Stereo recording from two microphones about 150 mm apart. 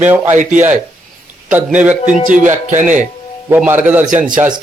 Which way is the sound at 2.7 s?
55° right (ahead or behind).